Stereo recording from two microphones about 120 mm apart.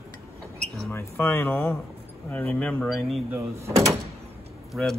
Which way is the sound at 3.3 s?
25° right (ahead or behind).